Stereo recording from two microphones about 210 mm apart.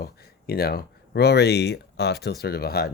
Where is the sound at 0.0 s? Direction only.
45° left (ahead or behind).